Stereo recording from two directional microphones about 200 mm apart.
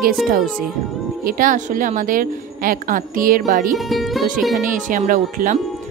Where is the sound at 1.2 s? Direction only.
45° right (ahead or behind).